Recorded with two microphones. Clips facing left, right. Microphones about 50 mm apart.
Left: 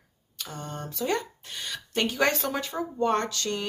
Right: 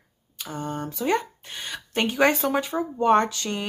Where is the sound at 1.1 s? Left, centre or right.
Right.